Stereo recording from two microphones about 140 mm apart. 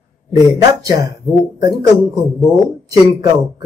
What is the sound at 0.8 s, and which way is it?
Speech, 30° right (ahead or behind).